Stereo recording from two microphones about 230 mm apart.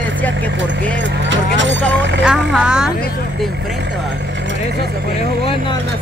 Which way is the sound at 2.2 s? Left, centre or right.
Centre.